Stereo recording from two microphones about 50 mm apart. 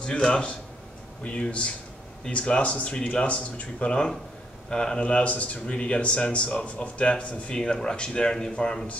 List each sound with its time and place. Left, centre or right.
0.0 s a man's voice: centre